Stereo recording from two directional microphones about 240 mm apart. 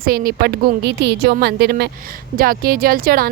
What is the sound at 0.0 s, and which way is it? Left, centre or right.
Speech, right.